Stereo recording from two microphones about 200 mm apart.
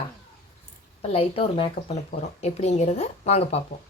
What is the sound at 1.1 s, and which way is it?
Speech, 30° left (ahead or behind).